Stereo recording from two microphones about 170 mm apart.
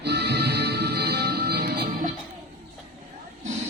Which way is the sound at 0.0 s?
75° right (ahead or behind).